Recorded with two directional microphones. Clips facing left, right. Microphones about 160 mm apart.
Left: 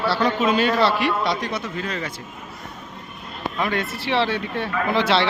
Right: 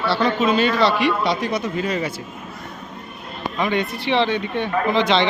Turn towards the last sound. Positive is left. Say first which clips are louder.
# right 2 dB
turn(degrees=5)  # may be behind; listen again after turning